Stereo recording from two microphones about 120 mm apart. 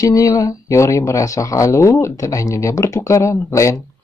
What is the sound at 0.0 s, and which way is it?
Speech, 30° left (ahead or behind).